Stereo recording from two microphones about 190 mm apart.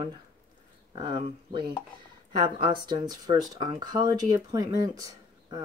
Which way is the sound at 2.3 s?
25° right (ahead or behind).